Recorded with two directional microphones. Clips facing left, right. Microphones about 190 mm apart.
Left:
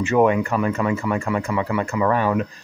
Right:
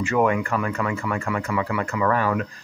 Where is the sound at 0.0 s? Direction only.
20° left (ahead or behind).